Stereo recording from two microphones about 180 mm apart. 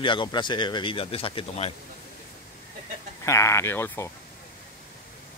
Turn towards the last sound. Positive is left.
turn(degrees=10)  # may be behind; listen again after turning